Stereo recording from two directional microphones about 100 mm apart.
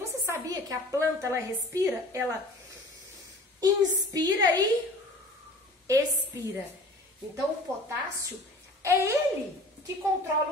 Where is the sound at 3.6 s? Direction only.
40° right (ahead or behind).